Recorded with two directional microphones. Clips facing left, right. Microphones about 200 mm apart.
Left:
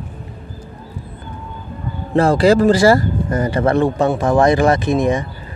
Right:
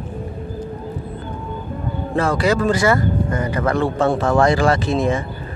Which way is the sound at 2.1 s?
35° left (ahead or behind).